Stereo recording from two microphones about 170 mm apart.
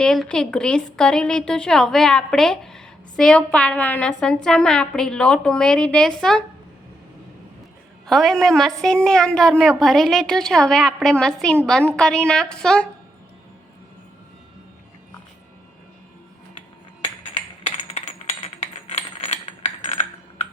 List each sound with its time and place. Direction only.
0.0 s a woman's voice: 5° left (ahead or behind)
8.0 s a woman's voice: centre (ahead or behind)
18.6 s a sound: 40° left (ahead or behind)